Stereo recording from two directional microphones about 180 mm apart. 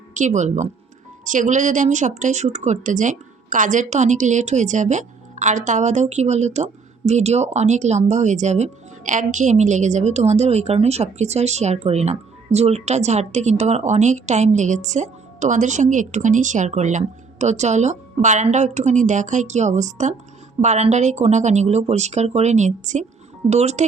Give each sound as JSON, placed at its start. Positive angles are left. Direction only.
{"t": 0.1, "sound": "speech", "side_deg": -40}